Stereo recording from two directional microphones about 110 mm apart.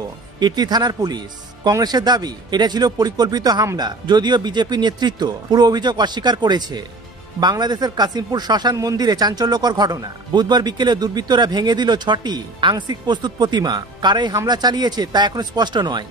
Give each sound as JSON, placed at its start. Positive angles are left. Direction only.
{"t": 0.4, "sound": "speech", "side_deg": -40}